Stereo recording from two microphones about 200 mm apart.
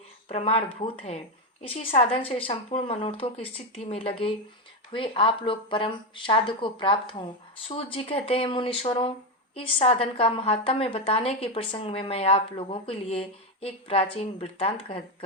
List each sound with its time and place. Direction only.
0.3 s a woman's voice: 30° left (ahead or behind)